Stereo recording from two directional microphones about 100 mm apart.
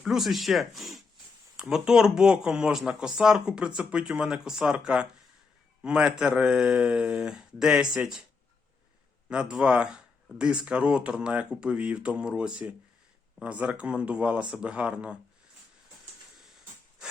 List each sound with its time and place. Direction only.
0.0 s speech: centre (ahead or behind)
9.3 s speech: 10° right (ahead or behind)